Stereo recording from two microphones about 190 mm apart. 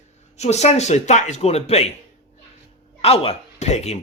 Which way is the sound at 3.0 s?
30° left (ahead or behind).